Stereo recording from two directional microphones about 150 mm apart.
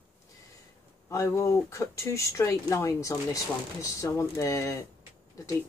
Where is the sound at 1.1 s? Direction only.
20° left (ahead or behind).